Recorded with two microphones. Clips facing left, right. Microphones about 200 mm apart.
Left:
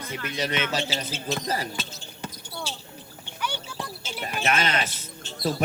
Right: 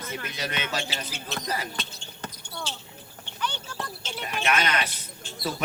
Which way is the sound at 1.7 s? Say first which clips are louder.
Left 2 dB; 5° left (ahead or behind).